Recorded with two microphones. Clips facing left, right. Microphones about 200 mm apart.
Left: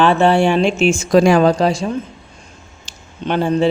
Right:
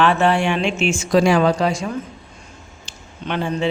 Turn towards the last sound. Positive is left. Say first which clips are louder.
# left 6 dB
turn(degrees=35)  # may be behind; listen again after turning